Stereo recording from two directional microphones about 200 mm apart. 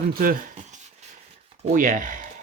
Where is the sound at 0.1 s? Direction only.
45° right (ahead or behind).